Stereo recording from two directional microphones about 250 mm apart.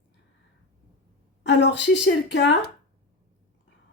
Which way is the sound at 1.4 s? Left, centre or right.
Left.